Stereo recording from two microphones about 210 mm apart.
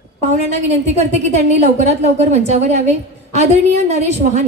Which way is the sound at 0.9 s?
30° right (ahead or behind).